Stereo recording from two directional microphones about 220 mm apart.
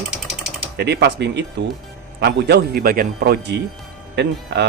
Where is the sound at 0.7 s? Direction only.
50° right (ahead or behind).